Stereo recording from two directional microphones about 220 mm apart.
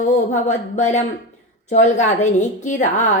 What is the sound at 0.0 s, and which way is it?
Speech, 30° left (ahead or behind).